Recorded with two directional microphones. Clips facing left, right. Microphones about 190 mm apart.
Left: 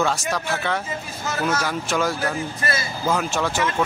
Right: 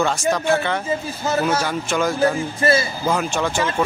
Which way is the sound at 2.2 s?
30° right (ahead or behind).